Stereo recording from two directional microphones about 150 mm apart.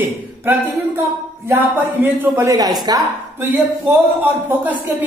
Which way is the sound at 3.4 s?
15° right (ahead or behind).